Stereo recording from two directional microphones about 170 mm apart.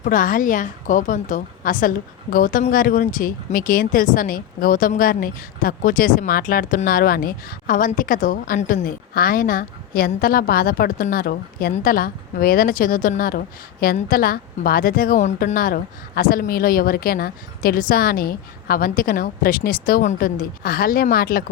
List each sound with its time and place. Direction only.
0.0 s a woman's voice: 55° left (ahead or behind)